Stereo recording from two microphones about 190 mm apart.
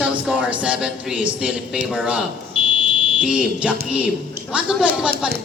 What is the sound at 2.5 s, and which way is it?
Fire alarm, 25° left (ahead or behind).